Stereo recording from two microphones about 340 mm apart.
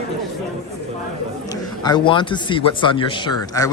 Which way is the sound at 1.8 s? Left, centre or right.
Centre.